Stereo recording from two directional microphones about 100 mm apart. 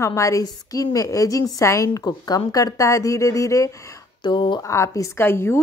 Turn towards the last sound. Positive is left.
turn(degrees=25)  # may be behind; listen again after turning